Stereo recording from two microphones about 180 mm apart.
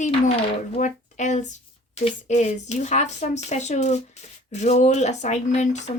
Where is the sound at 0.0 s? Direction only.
40° left (ahead or behind).